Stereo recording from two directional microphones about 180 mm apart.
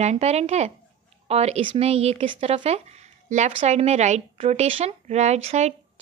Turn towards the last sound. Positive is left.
turn(degrees=-40)  # may be behind; listen again after turning